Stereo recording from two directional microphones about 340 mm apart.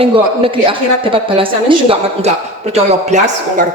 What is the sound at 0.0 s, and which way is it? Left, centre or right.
A woman's voice, centre.